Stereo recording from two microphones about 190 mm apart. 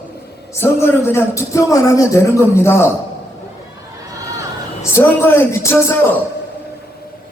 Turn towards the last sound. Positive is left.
turn(degrees=10)  # may be behind; listen again after turning